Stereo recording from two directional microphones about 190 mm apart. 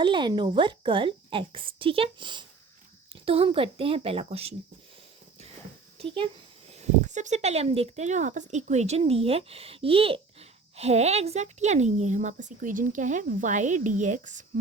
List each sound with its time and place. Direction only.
0.0 s a woman's voice: 25° right (ahead or behind)
6.7 s speech: 35° right (ahead or behind)